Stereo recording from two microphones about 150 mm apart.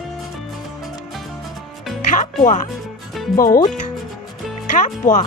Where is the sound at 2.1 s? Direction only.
55° left (ahead or behind).